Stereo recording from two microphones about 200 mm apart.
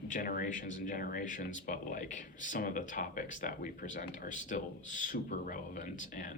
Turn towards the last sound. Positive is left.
turn(degrees=40)  # may be behind; listen again after turning